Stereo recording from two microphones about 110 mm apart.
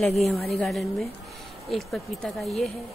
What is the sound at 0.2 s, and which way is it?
Speech, centre (ahead or behind).